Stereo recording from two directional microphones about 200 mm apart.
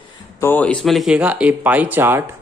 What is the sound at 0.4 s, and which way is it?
Speech, 10° left (ahead or behind).